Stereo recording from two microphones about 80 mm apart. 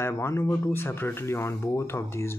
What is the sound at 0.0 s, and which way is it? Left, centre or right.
Speech, left.